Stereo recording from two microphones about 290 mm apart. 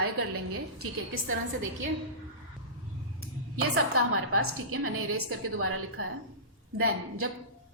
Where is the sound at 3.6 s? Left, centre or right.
Right.